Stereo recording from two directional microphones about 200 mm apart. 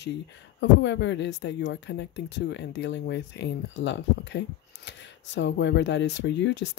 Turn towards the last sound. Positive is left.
turn(degrees=65)  # may be behind; listen again after turning